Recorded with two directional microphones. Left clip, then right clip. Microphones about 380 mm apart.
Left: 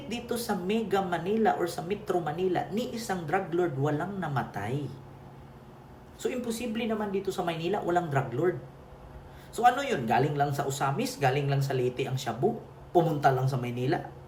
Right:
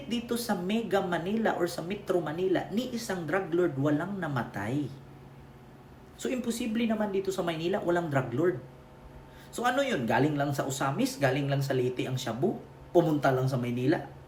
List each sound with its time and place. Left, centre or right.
0.1 s a woman's voice: centre
6.2 s a woman's voice: centre
9.6 s a woman's voice: centre